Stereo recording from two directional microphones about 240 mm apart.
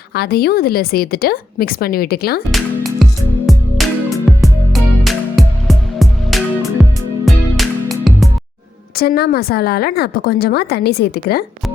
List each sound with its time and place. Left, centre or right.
0.1 s a woman's voice: left
2.5 s music: centre
9.0 s a woman's voice: left